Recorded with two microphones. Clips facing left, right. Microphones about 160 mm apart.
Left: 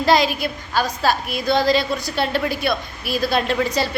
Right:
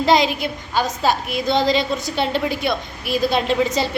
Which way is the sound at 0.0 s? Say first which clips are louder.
Right 1 dB; 20° right (ahead or behind).